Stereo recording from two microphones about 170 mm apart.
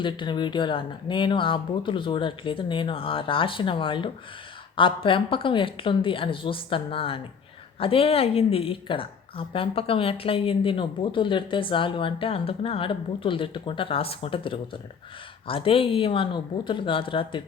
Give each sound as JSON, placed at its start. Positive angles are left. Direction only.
{"t": 0.0, "sound": "a woman's voice", "side_deg": 30}